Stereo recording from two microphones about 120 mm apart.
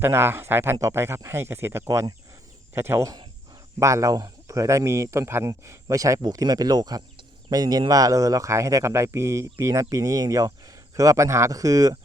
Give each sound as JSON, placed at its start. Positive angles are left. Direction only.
{"t": 0.0, "sound": "speech", "side_deg": -20}